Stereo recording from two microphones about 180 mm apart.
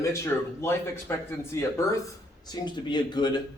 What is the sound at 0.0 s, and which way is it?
Speech, 15° left (ahead or behind).